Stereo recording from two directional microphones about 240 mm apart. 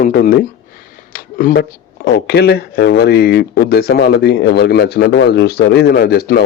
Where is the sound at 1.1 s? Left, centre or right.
Left.